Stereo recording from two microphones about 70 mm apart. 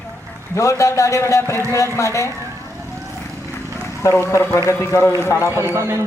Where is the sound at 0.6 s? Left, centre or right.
Left.